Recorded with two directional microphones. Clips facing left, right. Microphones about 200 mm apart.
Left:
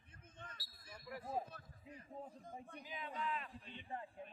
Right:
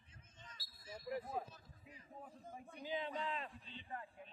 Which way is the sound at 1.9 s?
30° left (ahead or behind).